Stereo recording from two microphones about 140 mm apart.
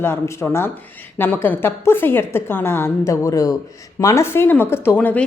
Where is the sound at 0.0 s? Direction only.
20° left (ahead or behind).